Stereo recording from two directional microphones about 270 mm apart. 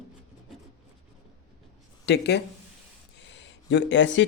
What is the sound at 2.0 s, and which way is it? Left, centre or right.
Speech, left.